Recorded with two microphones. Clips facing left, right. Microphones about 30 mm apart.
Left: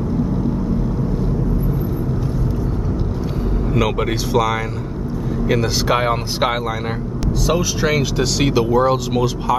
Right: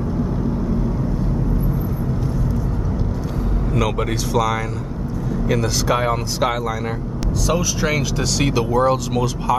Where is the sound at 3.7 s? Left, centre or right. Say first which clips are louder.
Left 2 dB; centre.